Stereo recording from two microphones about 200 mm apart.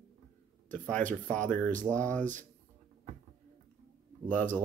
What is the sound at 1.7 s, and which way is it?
Speech, 40° right (ahead or behind).